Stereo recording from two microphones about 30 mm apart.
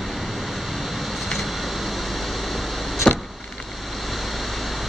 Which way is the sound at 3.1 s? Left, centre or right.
Centre.